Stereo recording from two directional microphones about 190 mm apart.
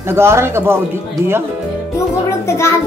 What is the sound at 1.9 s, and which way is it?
Speech, 15° left (ahead or behind).